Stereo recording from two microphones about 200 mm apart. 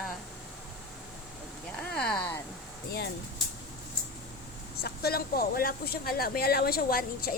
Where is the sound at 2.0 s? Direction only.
5° left (ahead or behind).